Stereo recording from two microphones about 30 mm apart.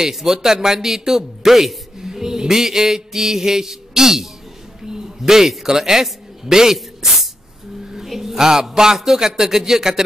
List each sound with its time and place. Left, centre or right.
0.0 s mantra: centre
2.0 s mantra: centre
4.8 s a sound: centre
5.7 s a man's voice: centre
8.9 s mantra: centre